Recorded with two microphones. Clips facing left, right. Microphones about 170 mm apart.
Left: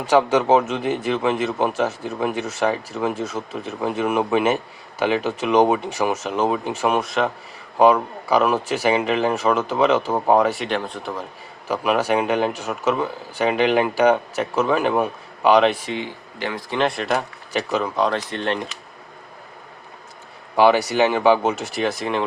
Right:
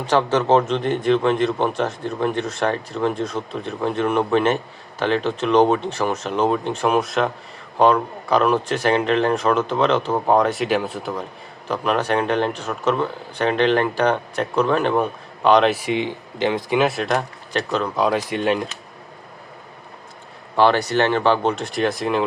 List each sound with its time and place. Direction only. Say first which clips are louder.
0.0 s speech: left 2 dB; 10° left (ahead or behind)
11.7 s speech: left 1 dB; 10° left (ahead or behind)
15.7 s speech: right 5 dB; 15° right (ahead or behind)
16.7 s speech: left 1 dB; 5° right (ahead or behind)
20.6 s speech: left 1 dB; 10° left (ahead or behind)